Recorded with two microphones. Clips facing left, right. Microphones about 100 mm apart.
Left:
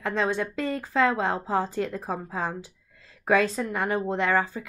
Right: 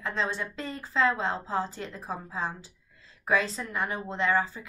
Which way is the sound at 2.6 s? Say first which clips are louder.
Left 5 dB; 60° left (ahead or behind).